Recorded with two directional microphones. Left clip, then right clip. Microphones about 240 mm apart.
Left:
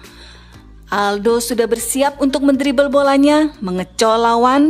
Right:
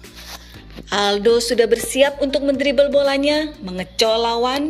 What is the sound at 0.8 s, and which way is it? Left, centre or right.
Music, centre.